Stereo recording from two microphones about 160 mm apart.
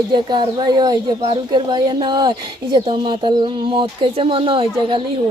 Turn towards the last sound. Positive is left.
turn(degrees=-35)  # may be behind; listen again after turning